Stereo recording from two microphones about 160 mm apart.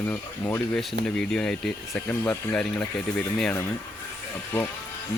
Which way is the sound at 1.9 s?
15° left (ahead or behind).